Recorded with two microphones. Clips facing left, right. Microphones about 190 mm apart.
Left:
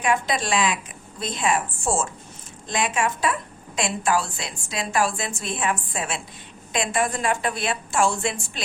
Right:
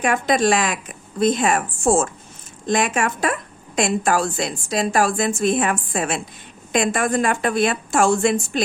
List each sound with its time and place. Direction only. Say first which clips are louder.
0.0 s a woman's voice: right 5 dB; 50° right (ahead or behind)